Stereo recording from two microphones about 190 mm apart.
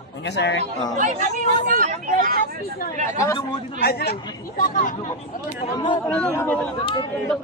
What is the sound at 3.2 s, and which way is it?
Speech, 15° left (ahead or behind).